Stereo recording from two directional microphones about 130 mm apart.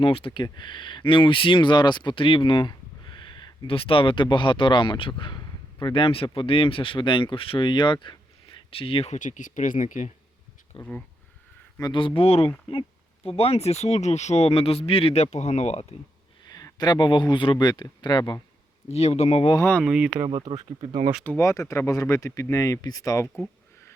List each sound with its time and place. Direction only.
0.0 s speech: 45° left (ahead or behind)
9.1 s speech: 75° left (ahead or behind)
10.7 s speech: 45° left (ahead or behind)
16.5 s speech: 30° left (ahead or behind)
18.9 s speech: 55° left (ahead or behind)
19.5 s speech: 15° left (ahead or behind)
19.8 s speech: 5° right (ahead or behind)
20.2 s speech: 40° right (ahead or behind)
21.2 s speech: 20° left (ahead or behind)